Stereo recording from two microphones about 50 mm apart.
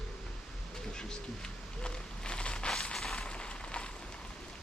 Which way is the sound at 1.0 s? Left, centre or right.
Centre.